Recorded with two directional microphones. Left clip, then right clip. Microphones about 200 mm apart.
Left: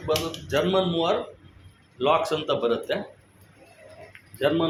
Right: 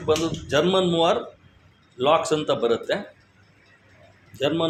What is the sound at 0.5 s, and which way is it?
Speech, 40° right (ahead or behind).